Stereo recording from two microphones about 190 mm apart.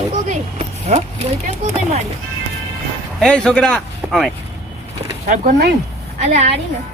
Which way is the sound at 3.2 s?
5° left (ahead or behind).